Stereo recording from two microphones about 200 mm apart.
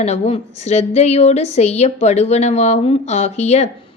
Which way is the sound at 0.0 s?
30° left (ahead or behind).